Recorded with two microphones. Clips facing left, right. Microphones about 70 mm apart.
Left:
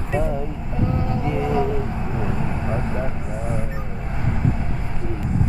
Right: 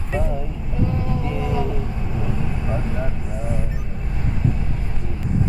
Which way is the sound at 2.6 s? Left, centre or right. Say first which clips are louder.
Left 1 dB; left.